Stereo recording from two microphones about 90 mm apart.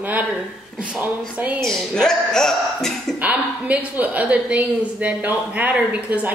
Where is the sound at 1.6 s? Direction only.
5° left (ahead or behind).